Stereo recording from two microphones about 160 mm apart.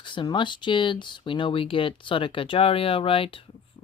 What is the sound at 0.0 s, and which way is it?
Speech, 30° left (ahead or behind).